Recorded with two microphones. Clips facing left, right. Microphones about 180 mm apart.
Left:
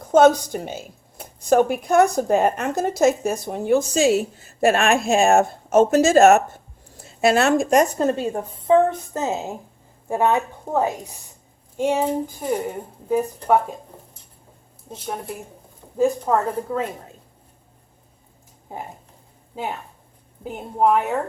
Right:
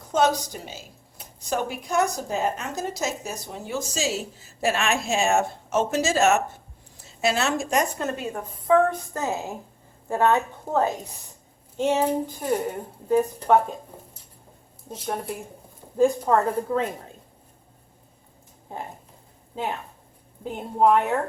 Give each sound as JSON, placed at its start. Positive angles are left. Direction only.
{"t": 0.1, "sound": "a woman's voice", "side_deg": 55}
{"t": 8.0, "sound": "a woman's voice", "side_deg": 30}
{"t": 16.0, "sound": "a woman's voice", "side_deg": 5}
{"t": 20.4, "sound": "a woman's voice", "side_deg": 5}